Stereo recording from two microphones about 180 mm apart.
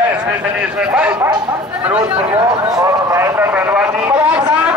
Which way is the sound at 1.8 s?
10° right (ahead or behind).